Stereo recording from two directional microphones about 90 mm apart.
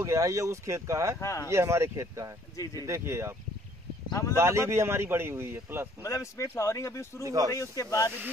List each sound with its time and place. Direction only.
0.0 s speech: 35° right (ahead or behind)
1.2 s speech: 35° left (ahead or behind)
1.5 s speech: 30° right (ahead or behind)
4.1 s speech: 35° left (ahead or behind)
4.4 s speech: 30° right (ahead or behind)
6.0 s speech: 35° left (ahead or behind)
7.2 s speech: 40° right (ahead or behind)
7.5 s speech: 35° left (ahead or behind)